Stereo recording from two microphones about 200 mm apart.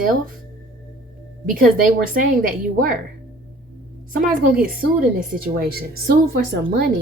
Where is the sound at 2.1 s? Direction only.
45° right (ahead or behind).